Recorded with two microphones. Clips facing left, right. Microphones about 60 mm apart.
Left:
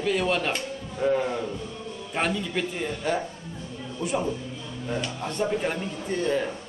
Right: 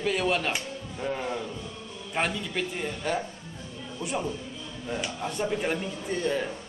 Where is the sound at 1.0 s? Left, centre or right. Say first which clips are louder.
Left 7 dB; centre.